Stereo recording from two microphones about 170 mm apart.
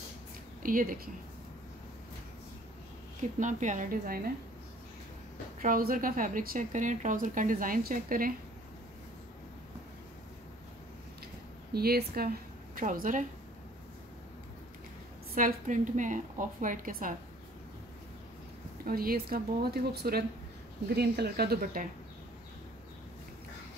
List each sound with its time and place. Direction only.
0.6 s speech: 55° right (ahead or behind)
3.2 s speech: 45° right (ahead or behind)
5.6 s speech: 55° right (ahead or behind)
11.7 s a woman's voice: 65° right (ahead or behind)
15.3 s speech: 50° right (ahead or behind)
18.9 s speech: 60° right (ahead or behind)